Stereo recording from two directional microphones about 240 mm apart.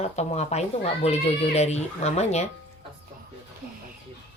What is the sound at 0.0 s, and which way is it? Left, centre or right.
Speech, left.